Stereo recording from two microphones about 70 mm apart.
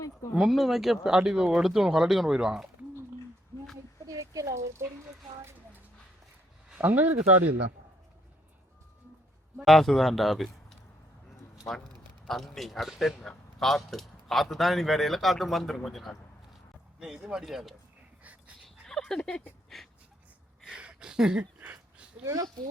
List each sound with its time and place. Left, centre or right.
0.3 s speech: centre
4.0 s a sound: right
6.8 s speech: right
9.6 s speech: centre
12.3 s speech: centre
17.0 s speech: centre
18.2 s dog: right
18.9 s speech: centre
19.7 s a sound: centre
20.7 s a sound: centre
22.2 s speech: right